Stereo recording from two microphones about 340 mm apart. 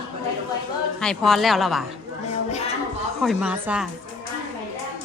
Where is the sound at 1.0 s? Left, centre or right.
Centre.